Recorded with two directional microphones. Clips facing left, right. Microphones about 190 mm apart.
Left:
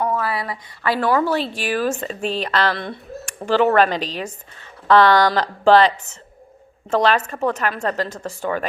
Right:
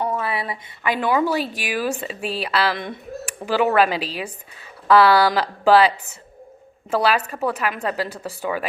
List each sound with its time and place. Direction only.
0.0 s a sound: 25° right (ahead or behind)
0.8 s a woman's voice: 20° right (ahead or behind)
2.7 s a woman's voice: 20° right (ahead or behind)
7.3 s a woman's voice: 10° right (ahead or behind)